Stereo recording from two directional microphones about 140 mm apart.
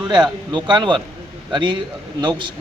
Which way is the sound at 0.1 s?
30° right (ahead or behind).